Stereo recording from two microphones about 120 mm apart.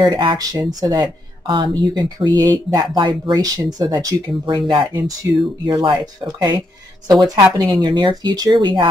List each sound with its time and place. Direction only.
0.0 s speech: 40° right (ahead or behind)